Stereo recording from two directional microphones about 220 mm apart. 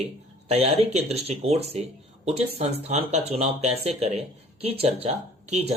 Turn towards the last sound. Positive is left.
turn(degrees=-30)  # may be behind; listen again after turning